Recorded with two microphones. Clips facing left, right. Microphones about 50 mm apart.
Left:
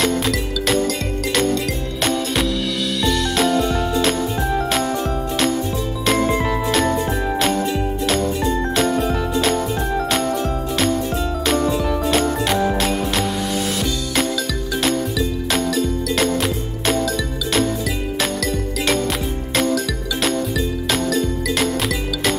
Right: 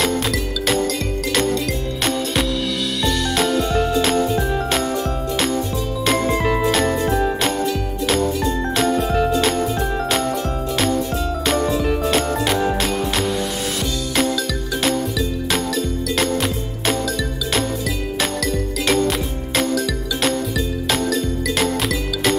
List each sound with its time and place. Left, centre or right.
1.3 s music: centre
3.0 s music: centre
6.0 s music: centre
6.7 s jingle: centre
8.7 s music: centre
11.4 s music: centre
14.8 s music: centre
18.9 s music: centre